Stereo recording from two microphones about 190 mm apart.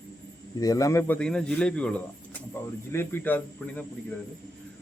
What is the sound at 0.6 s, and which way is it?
Speech, 20° left (ahead or behind).